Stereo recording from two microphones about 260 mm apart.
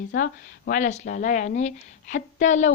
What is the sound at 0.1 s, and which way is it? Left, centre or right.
Speech, left.